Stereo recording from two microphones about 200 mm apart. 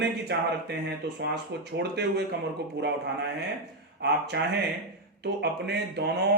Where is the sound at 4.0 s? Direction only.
55° right (ahead or behind).